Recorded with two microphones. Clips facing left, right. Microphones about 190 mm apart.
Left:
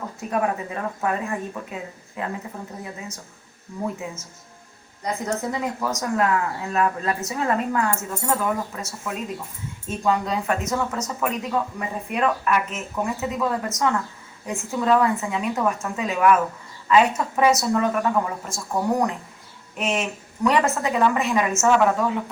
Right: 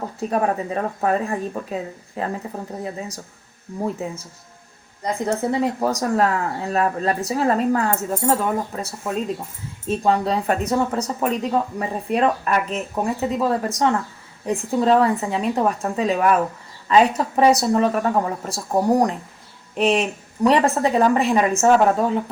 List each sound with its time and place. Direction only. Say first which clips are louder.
0.2 s speech: right 3 dB; 35° right (ahead or behind)
4.0 s speech: right 5 dB; 35° right (ahead or behind)
5.2 s speech: right 6 dB; 30° right (ahead or behind)